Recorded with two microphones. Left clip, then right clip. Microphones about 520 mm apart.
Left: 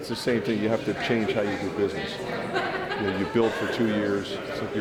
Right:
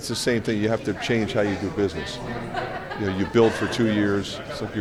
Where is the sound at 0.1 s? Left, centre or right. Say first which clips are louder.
Right 2 dB; right.